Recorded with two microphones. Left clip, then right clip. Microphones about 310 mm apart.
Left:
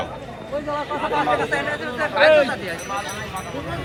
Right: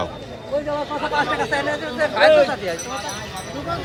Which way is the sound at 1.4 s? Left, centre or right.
Right.